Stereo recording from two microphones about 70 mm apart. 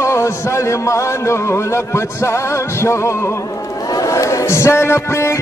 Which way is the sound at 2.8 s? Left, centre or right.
Left.